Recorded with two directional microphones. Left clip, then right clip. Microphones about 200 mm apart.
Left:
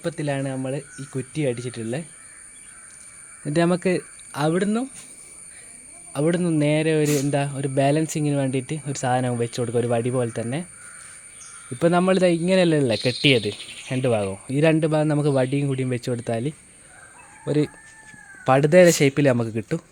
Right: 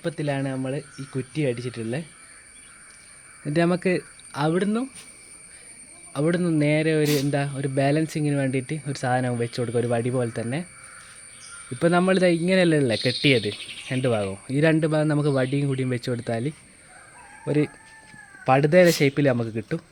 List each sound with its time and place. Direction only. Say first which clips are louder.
0.0 s speech: left 1 dB; 15° left (ahead or behind)
3.4 s speech: left 1 dB; 15° left (ahead or behind)
6.1 s speech: left 1 dB; 15° left (ahead or behind)
11.8 s speech: left 1 dB; 10° left (ahead or behind)